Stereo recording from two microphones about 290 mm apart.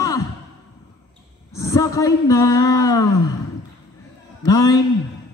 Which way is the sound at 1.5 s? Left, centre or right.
Centre.